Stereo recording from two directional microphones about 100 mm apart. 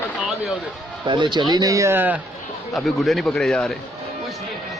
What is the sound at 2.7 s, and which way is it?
A man's voice, centre (ahead or behind).